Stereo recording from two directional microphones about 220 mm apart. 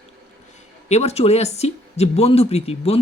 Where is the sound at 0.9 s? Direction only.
30° left (ahead or behind).